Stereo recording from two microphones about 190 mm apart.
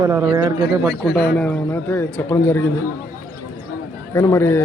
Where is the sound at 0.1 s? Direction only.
20° right (ahead or behind).